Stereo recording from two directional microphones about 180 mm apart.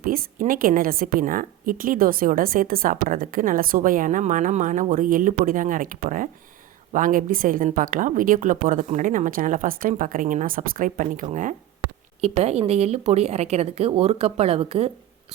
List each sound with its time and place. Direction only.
0.0 s a woman's voice: 50° right (ahead or behind)
12.2 s speech: 35° right (ahead or behind)